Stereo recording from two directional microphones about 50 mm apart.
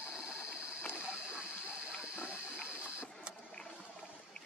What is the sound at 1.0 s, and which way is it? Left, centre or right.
Water, right.